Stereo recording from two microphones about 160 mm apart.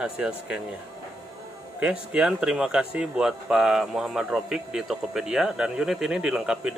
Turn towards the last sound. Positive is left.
turn(degrees=-5)  # may be behind; listen again after turning